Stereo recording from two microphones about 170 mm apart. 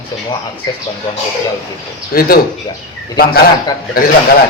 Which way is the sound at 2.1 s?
60° left (ahead or behind).